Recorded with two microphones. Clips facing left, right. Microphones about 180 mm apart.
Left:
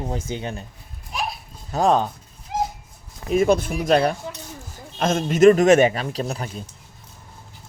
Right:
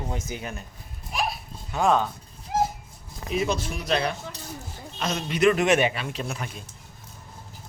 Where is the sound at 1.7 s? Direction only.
35° left (ahead or behind).